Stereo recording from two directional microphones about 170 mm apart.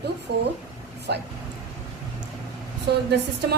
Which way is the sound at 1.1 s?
80° right.